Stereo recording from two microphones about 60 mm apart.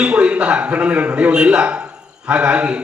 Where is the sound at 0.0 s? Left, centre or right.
Centre.